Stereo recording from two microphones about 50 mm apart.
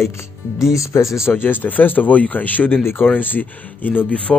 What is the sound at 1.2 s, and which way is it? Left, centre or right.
Speech, left.